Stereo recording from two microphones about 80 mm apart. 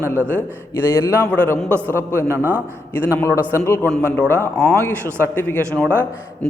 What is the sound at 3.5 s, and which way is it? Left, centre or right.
A man's voice, left.